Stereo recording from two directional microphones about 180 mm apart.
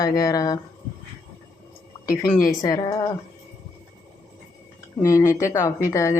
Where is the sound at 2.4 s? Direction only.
20° left (ahead or behind).